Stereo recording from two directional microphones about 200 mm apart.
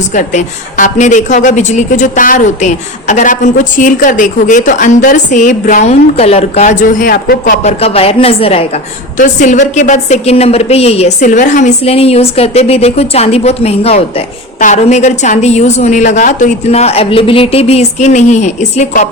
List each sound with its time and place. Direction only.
0.1 s a woman's voice: 40° left (ahead or behind)
7.6 s a woman's voice: 30° left (ahead or behind)